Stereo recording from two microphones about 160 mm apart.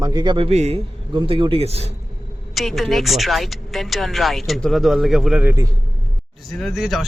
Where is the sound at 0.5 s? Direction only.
45° right (ahead or behind).